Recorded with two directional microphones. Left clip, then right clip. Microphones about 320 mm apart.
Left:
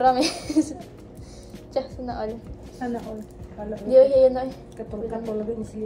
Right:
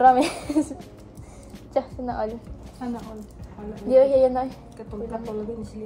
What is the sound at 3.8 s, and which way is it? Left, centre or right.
Speech, right.